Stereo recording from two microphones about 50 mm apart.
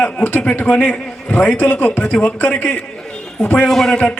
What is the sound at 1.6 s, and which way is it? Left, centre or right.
Speech, left.